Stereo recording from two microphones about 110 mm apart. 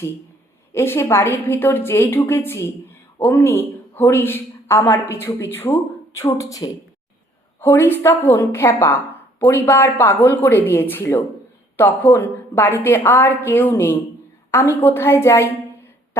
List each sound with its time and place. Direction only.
0.7 s a woman's voice: 25° left (ahead or behind)